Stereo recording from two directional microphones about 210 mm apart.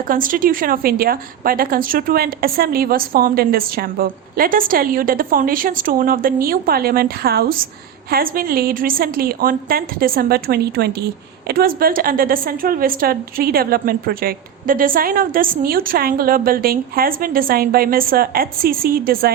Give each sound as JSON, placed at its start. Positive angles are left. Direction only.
{"t": 0.1, "sound": "a woman's voice", "side_deg": -40}